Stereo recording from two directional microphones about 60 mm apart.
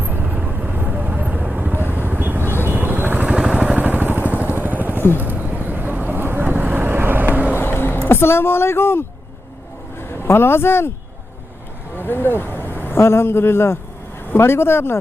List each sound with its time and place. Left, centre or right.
0.0 s vehicle: right
1.7 s vehicle: right
3.2 s vehicle: centre
3.8 s vehicle: right
4.9 s vehicle: left
5.4 s vehicle: right
7.5 s a sound: left
8.0 s a woman's voice: left
11.9 s a man's voice: left